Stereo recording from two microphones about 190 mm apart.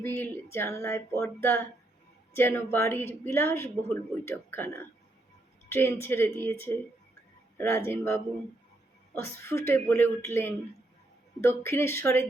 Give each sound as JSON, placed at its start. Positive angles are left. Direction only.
{"t": 0.0, "sound": "a woman's voice", "side_deg": 10}
{"t": 7.9, "sound": "a woman's voice", "side_deg": 15}